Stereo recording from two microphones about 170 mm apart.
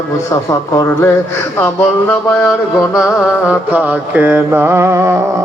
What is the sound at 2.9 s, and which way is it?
Mantra, 5° right (ahead or behind).